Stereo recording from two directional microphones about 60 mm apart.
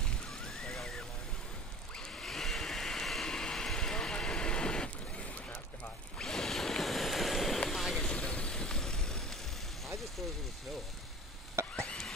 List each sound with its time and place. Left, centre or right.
0.0 s a sound: centre
2.0 s vacuum cleaner: centre
6.1 s a sound: centre
7.7 s vehicle: centre
8.1 s vehicle: centre
11.7 s stir: centre